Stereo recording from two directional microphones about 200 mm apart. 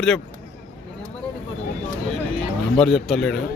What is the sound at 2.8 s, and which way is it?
Speech, centre (ahead or behind).